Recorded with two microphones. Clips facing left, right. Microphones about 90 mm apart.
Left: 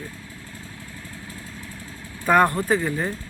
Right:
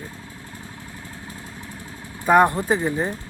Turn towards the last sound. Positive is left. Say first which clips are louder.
# right 1 dB
turn(degrees=-20)  # may be behind; listen again after turning